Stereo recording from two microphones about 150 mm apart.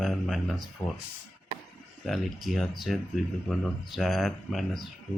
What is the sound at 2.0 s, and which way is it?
Speech, centre (ahead or behind).